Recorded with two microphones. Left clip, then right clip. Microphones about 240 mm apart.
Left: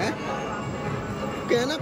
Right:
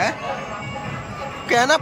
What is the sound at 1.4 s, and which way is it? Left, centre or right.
Speech, centre.